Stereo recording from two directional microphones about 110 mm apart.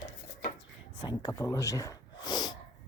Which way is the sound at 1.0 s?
40° left (ahead or behind).